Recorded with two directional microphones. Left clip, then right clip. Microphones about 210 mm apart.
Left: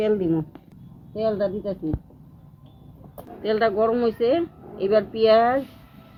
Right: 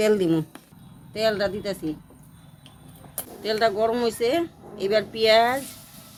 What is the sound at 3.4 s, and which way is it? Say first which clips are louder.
Speech: left 1 dB; 25° left (ahead or behind).